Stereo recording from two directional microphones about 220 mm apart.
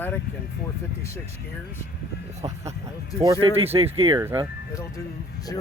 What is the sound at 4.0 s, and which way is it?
Speech, 20° right (ahead or behind).